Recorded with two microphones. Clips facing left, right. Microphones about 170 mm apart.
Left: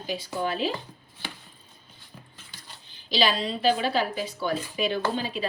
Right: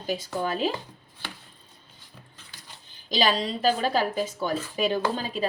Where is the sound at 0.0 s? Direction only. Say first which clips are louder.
Right 1 dB; 45° right (ahead or behind).